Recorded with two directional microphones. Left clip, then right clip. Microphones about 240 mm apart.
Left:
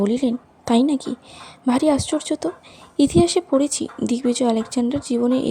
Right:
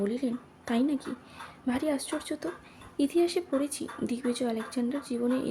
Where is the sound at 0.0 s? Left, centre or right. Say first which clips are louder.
Left 10 dB; left.